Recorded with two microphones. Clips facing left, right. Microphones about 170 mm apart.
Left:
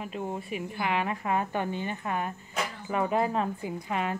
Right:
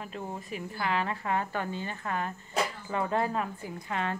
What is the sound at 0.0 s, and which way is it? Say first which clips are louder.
Speech: left 4 dB; 15° left (ahead or behind).